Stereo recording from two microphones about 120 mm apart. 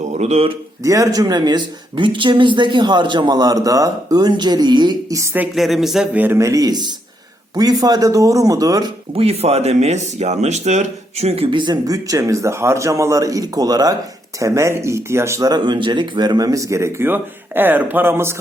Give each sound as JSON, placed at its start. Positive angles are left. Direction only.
{"t": 0.0, "sound": "speech", "side_deg": -65}
{"t": 0.8, "sound": "speech", "side_deg": -25}
{"t": 5.5, "sound": "speech", "side_deg": 0}
{"t": 6.1, "sound": "speech", "side_deg": -20}
{"t": 9.1, "sound": "speech", "side_deg": -55}
{"t": 11.5, "sound": "speech", "side_deg": -40}